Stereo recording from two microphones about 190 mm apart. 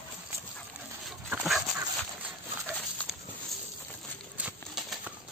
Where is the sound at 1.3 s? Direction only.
5° right (ahead or behind).